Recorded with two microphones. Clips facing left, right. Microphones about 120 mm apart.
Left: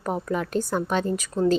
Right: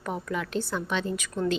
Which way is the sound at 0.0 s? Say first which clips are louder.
Left 5 dB; 40° left (ahead or behind).